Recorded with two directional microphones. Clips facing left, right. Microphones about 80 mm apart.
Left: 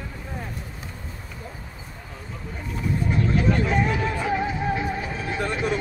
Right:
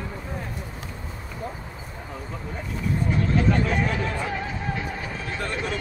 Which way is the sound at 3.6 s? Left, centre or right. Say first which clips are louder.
Left 2 dB; centre.